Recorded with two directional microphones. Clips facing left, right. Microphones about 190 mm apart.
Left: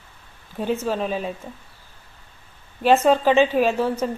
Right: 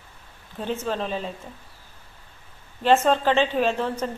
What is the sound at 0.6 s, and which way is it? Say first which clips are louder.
Speech: left 4 dB; 10° left (ahead or behind).